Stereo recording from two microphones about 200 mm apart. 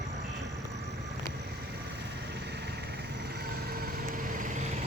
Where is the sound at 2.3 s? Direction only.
55° right (ahead or behind).